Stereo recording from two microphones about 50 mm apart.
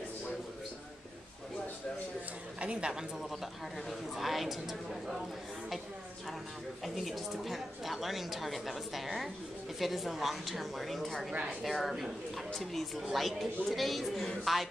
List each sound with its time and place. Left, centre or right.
2.6 s a woman's voice: right
4.2 s a woman's voice: centre
6.8 s a woman's voice: centre